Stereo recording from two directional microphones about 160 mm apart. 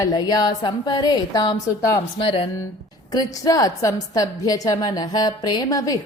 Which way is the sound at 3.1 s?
25° left (ahead or behind).